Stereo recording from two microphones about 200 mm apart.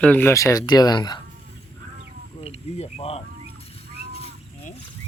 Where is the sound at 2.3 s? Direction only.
30° left (ahead or behind).